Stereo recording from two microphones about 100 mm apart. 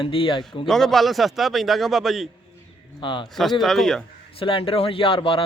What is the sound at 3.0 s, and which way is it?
Speech, 55° left (ahead or behind).